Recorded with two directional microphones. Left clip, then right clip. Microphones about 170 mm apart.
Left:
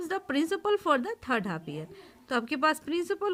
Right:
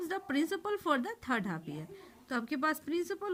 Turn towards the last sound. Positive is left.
turn(degrees=35)  # may be behind; listen again after turning